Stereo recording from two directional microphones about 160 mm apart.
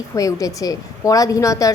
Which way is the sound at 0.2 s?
20° left (ahead or behind).